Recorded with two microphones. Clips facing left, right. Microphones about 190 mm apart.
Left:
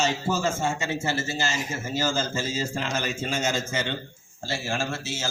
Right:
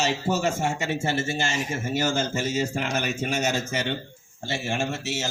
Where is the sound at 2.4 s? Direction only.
70° right (ahead or behind).